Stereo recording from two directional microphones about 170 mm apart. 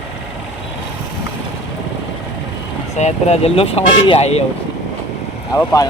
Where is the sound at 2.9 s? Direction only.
40° left (ahead or behind).